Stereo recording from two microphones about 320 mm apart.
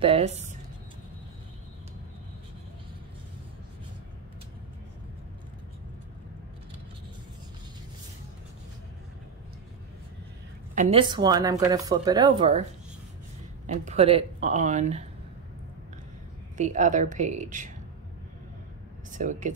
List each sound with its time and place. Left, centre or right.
0.0 s speech: centre
10.7 s speech: right
13.7 s speech: right
16.5 s speech: right
19.1 s speech: right